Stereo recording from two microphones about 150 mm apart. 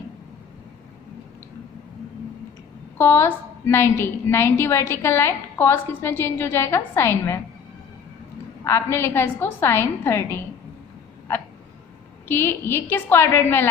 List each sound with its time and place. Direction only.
3.0 s a woman's voice: 15° left (ahead or behind)
8.6 s a woman's voice: 15° left (ahead or behind)
12.3 s a woman's voice: 15° left (ahead or behind)